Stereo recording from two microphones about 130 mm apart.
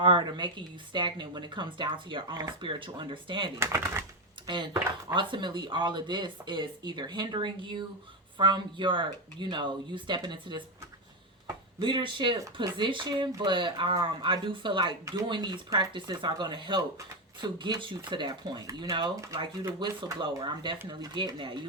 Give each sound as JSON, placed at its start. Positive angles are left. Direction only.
{"t": 0.0, "sound": "speech", "side_deg": -35}
{"t": 3.6, "sound": "speech", "side_deg": -20}
{"t": 4.4, "sound": "speech", "side_deg": -35}
{"t": 11.8, "sound": "speech", "side_deg": -40}